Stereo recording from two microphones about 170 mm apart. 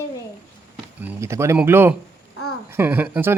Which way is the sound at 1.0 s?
15° right (ahead or behind).